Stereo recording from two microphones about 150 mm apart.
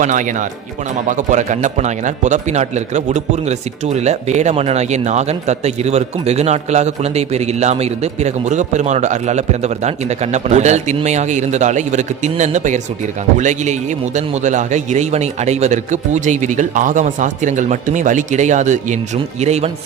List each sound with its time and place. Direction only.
0.0 s speech: 55° right (ahead or behind)